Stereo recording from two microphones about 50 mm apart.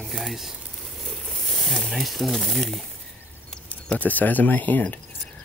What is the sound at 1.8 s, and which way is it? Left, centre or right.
Speech, centre.